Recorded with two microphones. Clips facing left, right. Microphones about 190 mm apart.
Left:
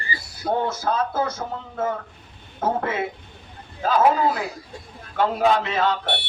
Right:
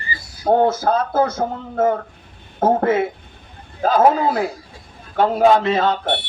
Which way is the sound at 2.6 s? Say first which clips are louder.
Right 8 dB; 45° right (ahead or behind).